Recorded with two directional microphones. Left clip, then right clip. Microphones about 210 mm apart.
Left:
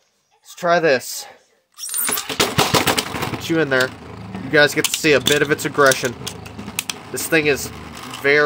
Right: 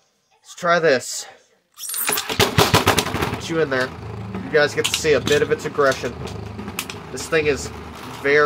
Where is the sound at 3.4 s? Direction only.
40° left (ahead or behind); by 6.1 s 55° left (ahead or behind).